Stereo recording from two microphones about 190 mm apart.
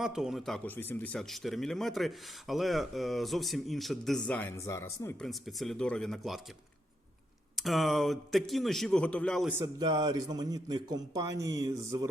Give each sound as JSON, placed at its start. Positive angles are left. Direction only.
{"t": 0.0, "sound": "speech", "side_deg": 0}
{"t": 5.2, "sound": "speech", "side_deg": 0}
{"t": 7.5, "sound": "speech", "side_deg": 0}
{"t": 9.5, "sound": "a man's voice", "side_deg": -20}